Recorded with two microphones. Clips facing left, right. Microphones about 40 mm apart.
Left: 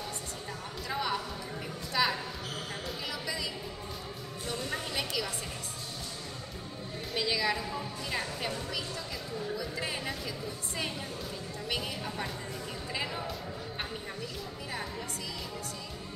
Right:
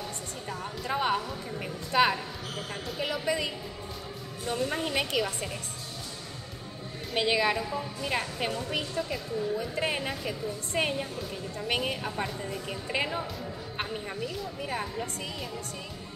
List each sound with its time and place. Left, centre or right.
0.8 s speech: right
1.6 s a sound: right
3.0 s a woman's voice: right
4.6 s a woman's voice: right
4.9 s a woman's voice: right
7.2 s a woman's voice: right
7.5 s speech: centre
8.0 s a woman's voice: right
8.6 s a woman's voice: right
14.2 s speech: centre